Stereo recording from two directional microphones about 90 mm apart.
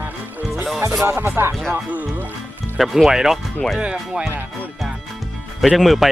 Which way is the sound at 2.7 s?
5° right (ahead or behind).